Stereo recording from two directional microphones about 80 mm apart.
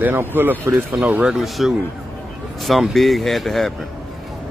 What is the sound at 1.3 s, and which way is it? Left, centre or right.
Speech, centre.